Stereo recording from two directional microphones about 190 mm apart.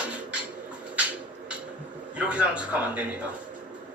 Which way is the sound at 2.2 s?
5° right (ahead or behind).